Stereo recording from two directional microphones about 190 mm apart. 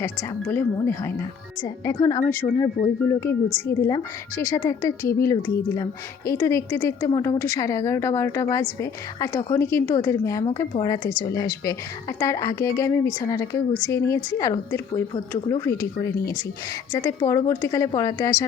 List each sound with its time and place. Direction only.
0.0 s a woman's voice: 10° left (ahead or behind)